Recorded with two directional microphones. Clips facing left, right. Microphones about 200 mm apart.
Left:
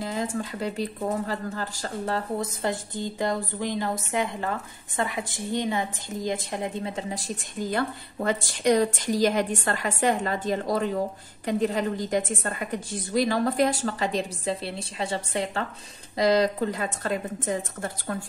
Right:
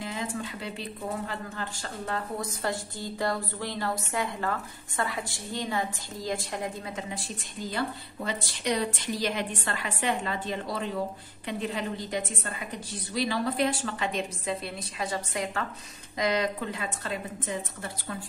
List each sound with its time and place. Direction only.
0.0 s a woman's voice: 40° left (ahead or behind)
2.6 s a woman's voice: 20° left (ahead or behind)
7.7 s a woman's voice: 50° left (ahead or behind)